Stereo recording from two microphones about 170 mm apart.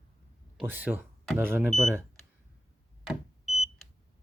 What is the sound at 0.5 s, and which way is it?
Speech, 10° right (ahead or behind).